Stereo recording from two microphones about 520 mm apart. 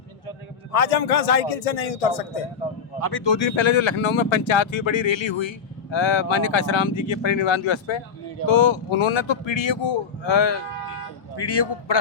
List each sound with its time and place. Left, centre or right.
0.3 s a man's voice: left
3.0 s a man's voice: left